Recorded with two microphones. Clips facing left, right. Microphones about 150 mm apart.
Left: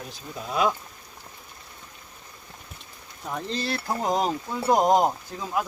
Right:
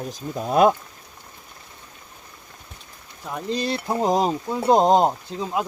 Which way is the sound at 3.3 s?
5° right (ahead or behind).